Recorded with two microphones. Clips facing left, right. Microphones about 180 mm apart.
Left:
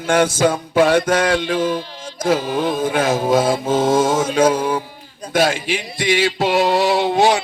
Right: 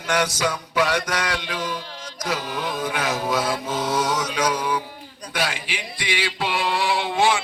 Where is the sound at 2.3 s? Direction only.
25° left (ahead or behind).